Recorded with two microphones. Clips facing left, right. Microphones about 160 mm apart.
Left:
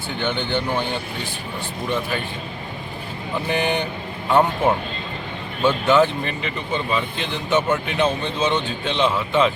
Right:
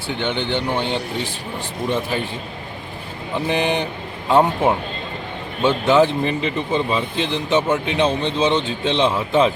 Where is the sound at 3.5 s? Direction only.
25° right (ahead or behind).